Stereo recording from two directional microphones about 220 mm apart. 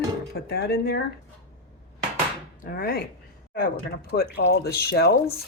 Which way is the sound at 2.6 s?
40° left (ahead or behind).